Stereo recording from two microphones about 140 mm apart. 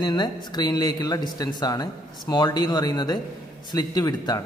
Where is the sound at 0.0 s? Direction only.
30° left (ahead or behind).